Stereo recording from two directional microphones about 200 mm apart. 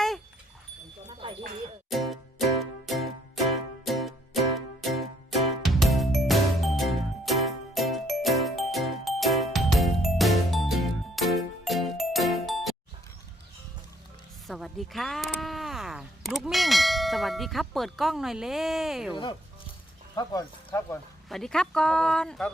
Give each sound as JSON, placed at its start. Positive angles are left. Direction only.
{"t": 1.2, "sound": "a sound", "side_deg": -25}
{"t": 1.9, "sound": "music", "side_deg": 0}
{"t": 14.4, "sound": "speech", "side_deg": 0}
{"t": 19.1, "sound": "speech", "side_deg": 25}
{"t": 21.2, "sound": "speech", "side_deg": 0}